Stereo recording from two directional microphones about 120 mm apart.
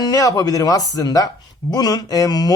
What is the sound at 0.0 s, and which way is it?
Speech, 30° left (ahead or behind).